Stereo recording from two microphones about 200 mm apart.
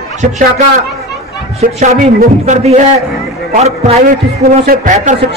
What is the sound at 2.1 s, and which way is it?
Speech, 40° right (ahead or behind).